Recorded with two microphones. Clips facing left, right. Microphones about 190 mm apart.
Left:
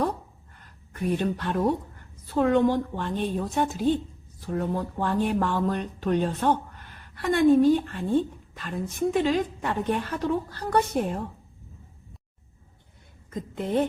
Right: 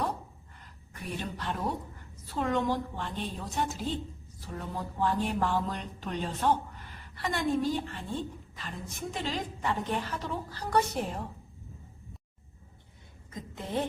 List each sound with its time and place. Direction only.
1.1 s a woman's voice: 55° left (ahead or behind)